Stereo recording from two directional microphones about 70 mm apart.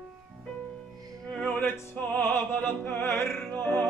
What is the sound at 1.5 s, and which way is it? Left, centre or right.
Music, left.